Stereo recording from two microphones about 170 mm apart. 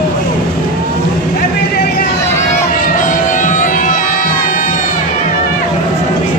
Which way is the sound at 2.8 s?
50° left (ahead or behind).